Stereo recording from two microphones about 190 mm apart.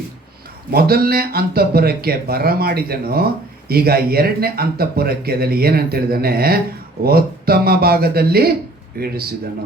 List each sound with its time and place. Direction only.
0.7 s speech: 55° right (ahead or behind)